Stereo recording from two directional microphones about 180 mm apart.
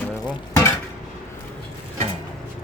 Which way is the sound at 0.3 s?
20° left (ahead or behind).